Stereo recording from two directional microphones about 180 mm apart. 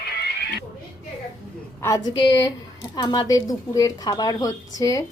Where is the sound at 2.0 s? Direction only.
20° left (ahead or behind).